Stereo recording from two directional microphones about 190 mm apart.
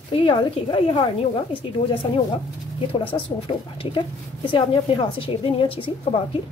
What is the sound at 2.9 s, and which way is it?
A woman's voice, 30° left (ahead or behind).